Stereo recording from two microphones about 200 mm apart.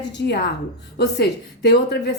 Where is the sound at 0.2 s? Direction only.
60° left (ahead or behind).